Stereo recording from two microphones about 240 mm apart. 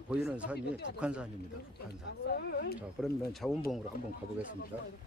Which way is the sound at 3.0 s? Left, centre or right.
Centre.